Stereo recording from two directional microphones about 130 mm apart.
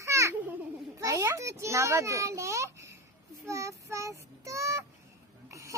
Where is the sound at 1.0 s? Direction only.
25° right (ahead or behind).